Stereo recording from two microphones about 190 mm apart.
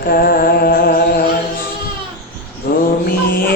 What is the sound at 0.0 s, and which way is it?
Music, 50° left (ahead or behind).